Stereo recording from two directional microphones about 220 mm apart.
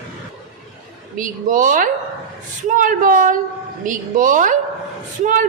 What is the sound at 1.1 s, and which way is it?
Speech, 35° right (ahead or behind).